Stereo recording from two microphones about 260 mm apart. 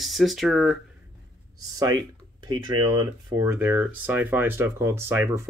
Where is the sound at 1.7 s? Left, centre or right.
Centre.